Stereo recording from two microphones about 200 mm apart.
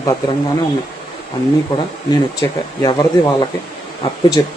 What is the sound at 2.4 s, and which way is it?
Speech, 15° left (ahead or behind).